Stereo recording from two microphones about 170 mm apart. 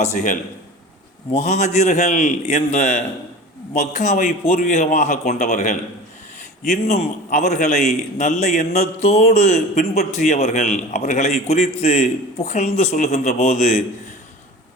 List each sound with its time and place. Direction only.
0.0 s a man's voice: 45° left (ahead or behind)